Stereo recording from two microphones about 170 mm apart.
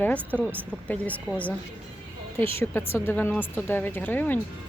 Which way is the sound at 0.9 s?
10° left (ahead or behind).